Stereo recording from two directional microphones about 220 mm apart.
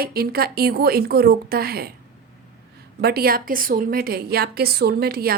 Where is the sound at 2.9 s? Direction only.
45° right (ahead or behind).